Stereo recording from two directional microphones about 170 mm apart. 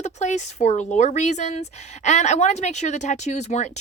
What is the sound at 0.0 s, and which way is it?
Speech, 45° left (ahead or behind).